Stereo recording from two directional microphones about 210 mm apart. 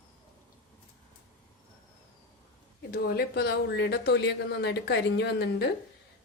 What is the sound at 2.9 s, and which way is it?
A woman's voice, 50° left (ahead or behind).